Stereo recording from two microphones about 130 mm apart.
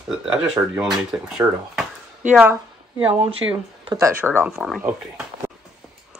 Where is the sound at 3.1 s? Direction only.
45° right (ahead or behind).